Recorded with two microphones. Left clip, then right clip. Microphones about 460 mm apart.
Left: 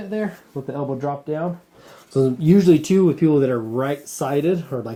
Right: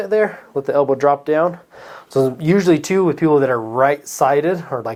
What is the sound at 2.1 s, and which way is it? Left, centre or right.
Speech, right.